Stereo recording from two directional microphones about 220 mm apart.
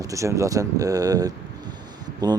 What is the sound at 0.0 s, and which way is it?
Speech, 15° right (ahead or behind).